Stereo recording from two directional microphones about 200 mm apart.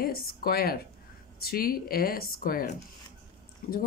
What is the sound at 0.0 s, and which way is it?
Speech, 50° left (ahead or behind).